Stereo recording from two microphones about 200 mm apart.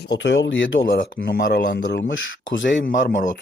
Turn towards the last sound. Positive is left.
turn(degrees=55)  # may be behind; listen again after turning